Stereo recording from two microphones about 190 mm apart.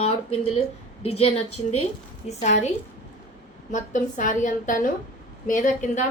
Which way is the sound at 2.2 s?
40° left (ahead or behind).